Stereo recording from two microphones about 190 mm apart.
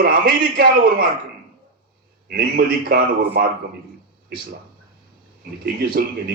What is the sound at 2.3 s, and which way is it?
A man's voice, 50° right (ahead or behind).